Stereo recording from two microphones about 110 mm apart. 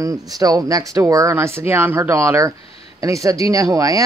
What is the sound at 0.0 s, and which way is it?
Speech, 30° right (ahead or behind).